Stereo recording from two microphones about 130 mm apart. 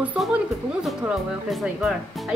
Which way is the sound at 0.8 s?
5° right (ahead or behind).